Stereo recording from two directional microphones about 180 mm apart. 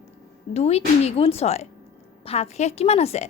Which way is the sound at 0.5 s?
35° left (ahead or behind).